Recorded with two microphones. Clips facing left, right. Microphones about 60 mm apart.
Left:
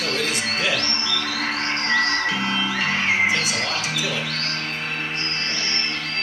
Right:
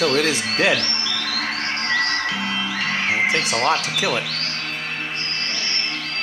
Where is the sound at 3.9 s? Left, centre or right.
Right.